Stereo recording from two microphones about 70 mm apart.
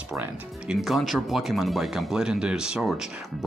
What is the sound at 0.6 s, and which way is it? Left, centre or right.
Speech, centre.